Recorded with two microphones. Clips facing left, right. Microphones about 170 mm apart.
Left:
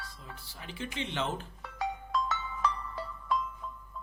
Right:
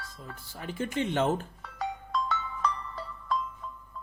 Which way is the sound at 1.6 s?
5° left (ahead or behind).